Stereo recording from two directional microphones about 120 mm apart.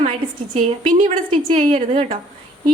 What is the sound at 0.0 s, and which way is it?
A woman's voice, 60° right (ahead or behind).